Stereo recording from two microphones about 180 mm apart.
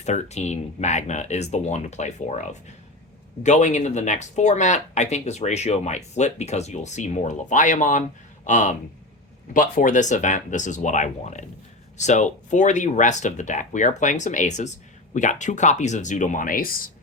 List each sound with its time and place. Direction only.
0.0 s speech: 40° left (ahead or behind)